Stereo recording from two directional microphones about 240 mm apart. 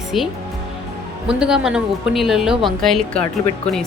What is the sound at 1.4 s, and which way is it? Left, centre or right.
A woman's voice, centre.